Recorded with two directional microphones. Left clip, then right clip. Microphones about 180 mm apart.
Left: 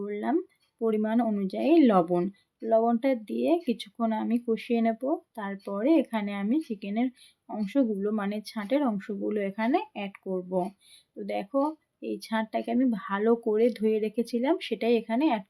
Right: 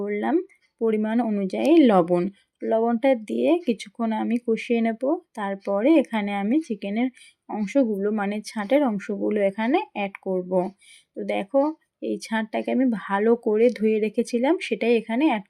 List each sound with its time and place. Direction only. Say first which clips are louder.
0.0 s speech: right 5 dB; 15° right (ahead or behind)